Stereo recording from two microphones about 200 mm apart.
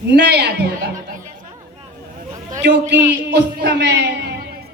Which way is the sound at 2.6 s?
60° right (ahead or behind).